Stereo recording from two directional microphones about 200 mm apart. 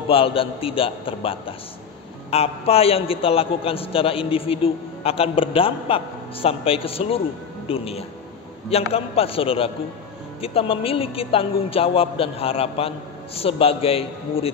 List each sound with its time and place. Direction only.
0.1 s a man's voice: 25° left (ahead or behind)